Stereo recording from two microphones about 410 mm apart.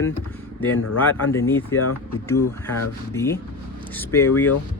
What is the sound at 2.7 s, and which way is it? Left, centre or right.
Speech, left.